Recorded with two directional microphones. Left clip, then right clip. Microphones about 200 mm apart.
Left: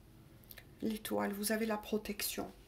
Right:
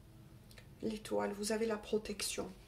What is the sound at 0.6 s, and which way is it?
Speech, 45° left (ahead or behind).